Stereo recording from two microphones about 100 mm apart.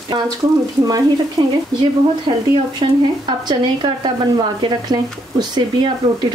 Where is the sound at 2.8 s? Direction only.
55° right (ahead or behind).